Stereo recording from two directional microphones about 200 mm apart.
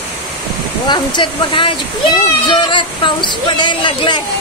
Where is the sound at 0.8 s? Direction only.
20° left (ahead or behind).